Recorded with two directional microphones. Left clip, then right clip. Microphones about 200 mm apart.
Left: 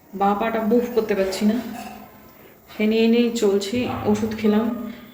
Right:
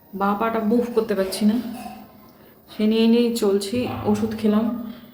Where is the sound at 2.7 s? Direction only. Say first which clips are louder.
Even; 15° right (ahead or behind).